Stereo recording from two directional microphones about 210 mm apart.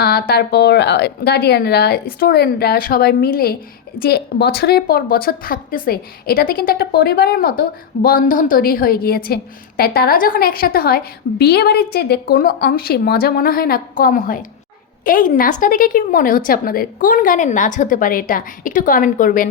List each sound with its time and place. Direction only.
0.0 s a woman's voice: 45° left (ahead or behind)